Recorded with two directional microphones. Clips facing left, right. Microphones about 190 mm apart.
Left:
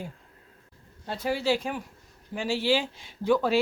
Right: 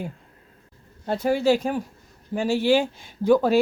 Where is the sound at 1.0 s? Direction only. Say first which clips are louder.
Right 7 dB; 50° right (ahead or behind).